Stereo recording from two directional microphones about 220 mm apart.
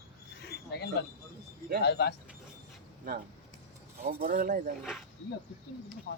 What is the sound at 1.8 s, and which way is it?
Speech, 45° left (ahead or behind).